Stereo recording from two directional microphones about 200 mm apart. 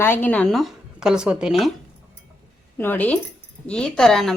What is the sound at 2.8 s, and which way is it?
Speech, 10° left (ahead or behind).